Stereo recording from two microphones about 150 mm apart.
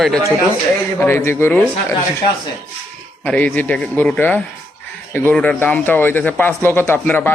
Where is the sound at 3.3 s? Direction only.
10° left (ahead or behind).